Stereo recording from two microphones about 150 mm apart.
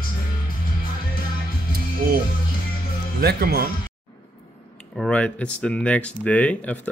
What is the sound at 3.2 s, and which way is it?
Speech, 90° right.